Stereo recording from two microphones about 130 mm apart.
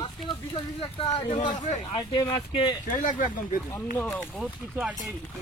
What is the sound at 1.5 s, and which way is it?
Speech, 70° left (ahead or behind).